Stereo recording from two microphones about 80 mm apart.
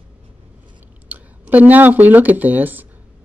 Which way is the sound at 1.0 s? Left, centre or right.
Right.